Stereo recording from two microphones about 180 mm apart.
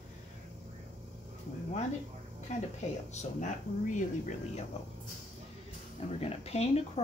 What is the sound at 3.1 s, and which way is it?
Speech, 45° left (ahead or behind).